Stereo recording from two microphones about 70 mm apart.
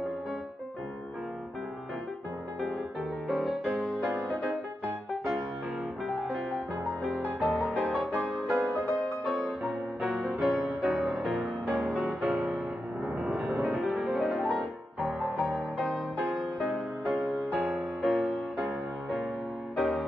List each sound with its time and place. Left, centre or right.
3.3 s music: centre
5.1 s music: centre
10.1 s music: centre
11.6 s music: right
11.9 s music: centre
13.3 s music: right
13.7 s music: centre
19.8 s music: centre